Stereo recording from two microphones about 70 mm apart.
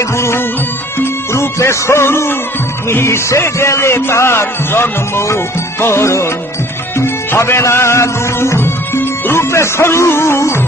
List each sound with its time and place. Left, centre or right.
0.9 s music: left